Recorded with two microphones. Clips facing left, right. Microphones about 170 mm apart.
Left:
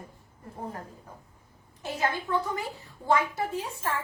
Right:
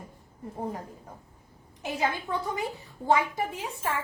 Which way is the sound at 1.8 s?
15° right (ahead or behind).